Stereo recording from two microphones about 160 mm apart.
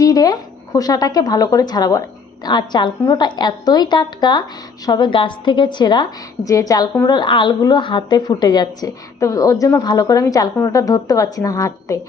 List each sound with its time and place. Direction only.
0.0 s a woman's voice: 20° left (ahead or behind)